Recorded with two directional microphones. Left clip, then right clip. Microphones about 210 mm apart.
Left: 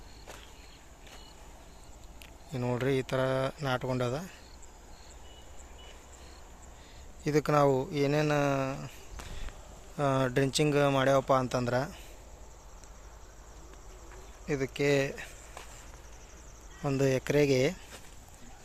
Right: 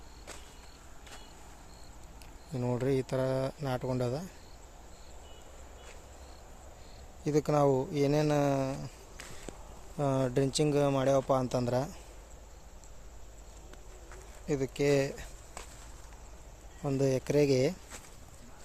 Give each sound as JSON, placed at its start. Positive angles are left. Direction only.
{"t": 2.5, "sound": "speech", "side_deg": -5}
{"t": 7.3, "sound": "speech", "side_deg": 0}
{"t": 10.0, "sound": "speech", "side_deg": 0}
{"t": 14.4, "sound": "speech", "side_deg": -10}
{"t": 16.8, "sound": "speech", "side_deg": 0}